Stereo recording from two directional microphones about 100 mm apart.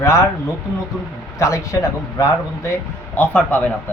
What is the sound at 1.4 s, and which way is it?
Speech, 30° left (ahead or behind).